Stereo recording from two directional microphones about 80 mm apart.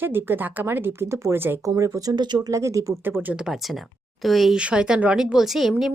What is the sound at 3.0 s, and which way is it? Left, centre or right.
Speech, right.